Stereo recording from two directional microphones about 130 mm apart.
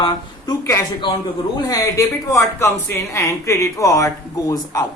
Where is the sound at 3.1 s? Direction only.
25° left (ahead or behind).